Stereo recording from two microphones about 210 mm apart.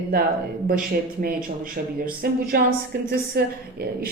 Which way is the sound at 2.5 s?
45° right (ahead or behind).